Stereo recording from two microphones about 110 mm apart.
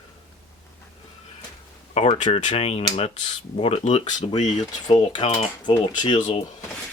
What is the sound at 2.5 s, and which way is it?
Speech, 65° left (ahead or behind).